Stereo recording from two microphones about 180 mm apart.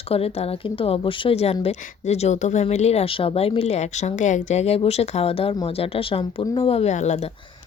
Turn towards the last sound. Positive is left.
turn(degrees=40)  # may be behind; listen again after turning